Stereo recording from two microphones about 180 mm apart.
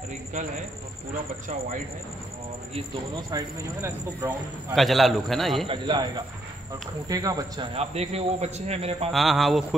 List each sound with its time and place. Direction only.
0.3 s a man's voice: 40° right (ahead or behind)
3.2 s speech: 20° right (ahead or behind)
4.7 s a man's voice: centre (ahead or behind)
5.7 s speech: 25° right (ahead or behind)
7.7 s a man's voice: 35° right (ahead or behind)
9.1 s a man's voice: centre (ahead or behind)